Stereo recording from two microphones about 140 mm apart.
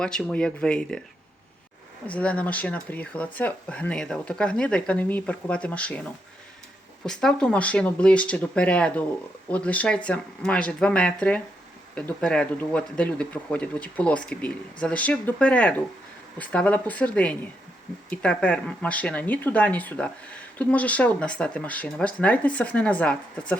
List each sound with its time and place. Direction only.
0.0 s speech: 5° left (ahead or behind)
2.0 s speech: 10° left (ahead or behind)
7.0 s speech: 5° left (ahead or behind)